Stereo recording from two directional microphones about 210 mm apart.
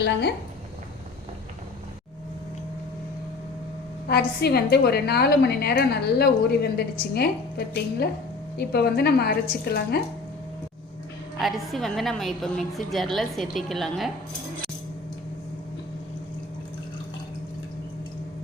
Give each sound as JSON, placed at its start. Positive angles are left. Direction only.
{"t": 0.0, "sound": "a woman's voice", "side_deg": 55}
{"t": 4.1, "sound": "a woman's voice", "side_deg": 50}
{"t": 11.3, "sound": "a woman's voice", "side_deg": 0}